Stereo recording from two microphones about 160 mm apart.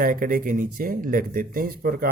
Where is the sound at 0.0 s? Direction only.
60° right (ahead or behind).